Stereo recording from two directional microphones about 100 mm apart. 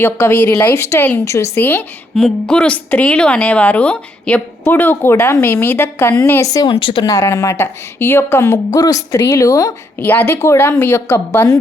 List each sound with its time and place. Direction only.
0.0 s a woman's voice: 20° left (ahead or behind)
2.1 s a woman's voice: 5° left (ahead or behind)
6.4 s a woman's voice: 35° left (ahead or behind)
6.7 s speech: 55° left (ahead or behind)
7.0 s a woman's voice: 35° left (ahead or behind)
8.8 s a woman's voice: 35° left (ahead or behind)
10.0 s a woman's voice: 20° left (ahead or behind)